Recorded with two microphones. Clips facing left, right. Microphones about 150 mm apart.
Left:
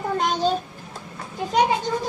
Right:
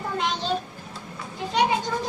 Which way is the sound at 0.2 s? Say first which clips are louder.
Left 6 dB; 45° left (ahead or behind).